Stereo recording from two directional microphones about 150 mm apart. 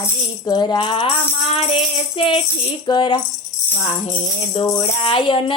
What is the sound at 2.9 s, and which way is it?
Music, 30° left (ahead or behind).